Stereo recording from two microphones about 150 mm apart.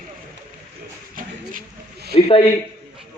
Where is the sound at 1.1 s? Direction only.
80° right.